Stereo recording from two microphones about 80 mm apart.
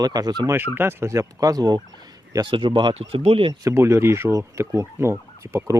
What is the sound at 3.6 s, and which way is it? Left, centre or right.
Speech, right.